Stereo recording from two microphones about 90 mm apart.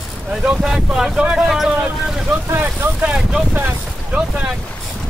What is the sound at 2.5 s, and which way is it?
Vehicle, 25° right (ahead or behind).